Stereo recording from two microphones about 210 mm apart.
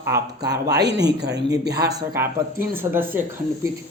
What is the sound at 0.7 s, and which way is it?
Speech, 55° right (ahead or behind).